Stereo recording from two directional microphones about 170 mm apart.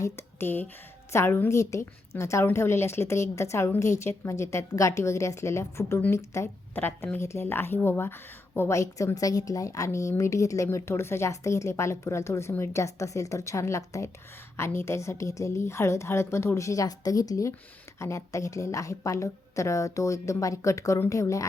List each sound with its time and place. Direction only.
0.0 s a woman's voice: 15° left (ahead or behind)